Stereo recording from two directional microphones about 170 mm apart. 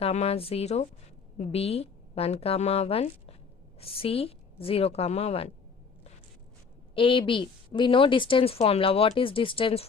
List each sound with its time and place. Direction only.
0.0 s a woman's voice: 40° left (ahead or behind)
6.9 s a woman's voice: 30° left (ahead or behind)